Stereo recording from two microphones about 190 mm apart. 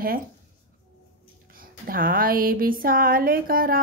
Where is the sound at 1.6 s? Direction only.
50° right (ahead or behind).